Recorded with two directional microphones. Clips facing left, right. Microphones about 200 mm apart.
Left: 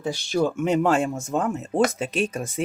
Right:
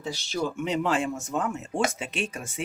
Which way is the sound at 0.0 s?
50° left (ahead or behind).